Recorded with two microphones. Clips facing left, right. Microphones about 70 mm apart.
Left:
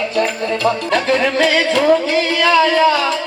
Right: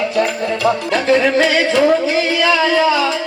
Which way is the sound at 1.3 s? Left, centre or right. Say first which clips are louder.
Right 1 dB; left.